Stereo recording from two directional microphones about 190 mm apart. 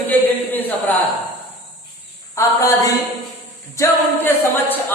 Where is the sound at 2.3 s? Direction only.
15° left (ahead or behind).